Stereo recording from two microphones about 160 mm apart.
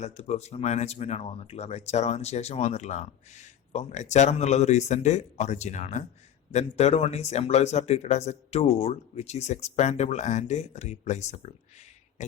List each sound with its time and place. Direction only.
0.0 s speech: 45° left (ahead or behind)